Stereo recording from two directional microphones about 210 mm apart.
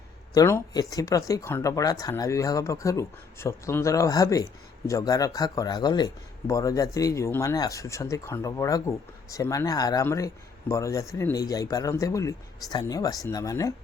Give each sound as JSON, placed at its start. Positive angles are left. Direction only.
{"t": 0.3, "sound": "speech", "side_deg": 15}